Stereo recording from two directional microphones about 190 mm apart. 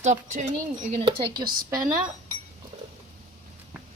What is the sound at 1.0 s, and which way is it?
Speech, 25° right (ahead or behind).